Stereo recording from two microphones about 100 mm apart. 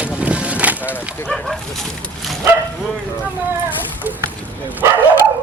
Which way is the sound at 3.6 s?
15° right (ahead or behind).